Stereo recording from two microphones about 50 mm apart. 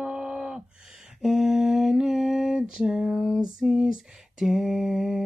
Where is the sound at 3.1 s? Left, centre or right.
Centre.